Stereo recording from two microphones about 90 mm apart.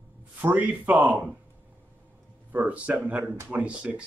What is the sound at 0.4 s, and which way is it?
Speech, 20° right (ahead or behind).